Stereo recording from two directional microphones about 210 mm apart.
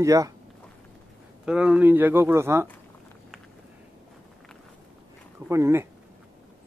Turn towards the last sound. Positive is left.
turn(degrees=-15)  # may be behind; listen again after turning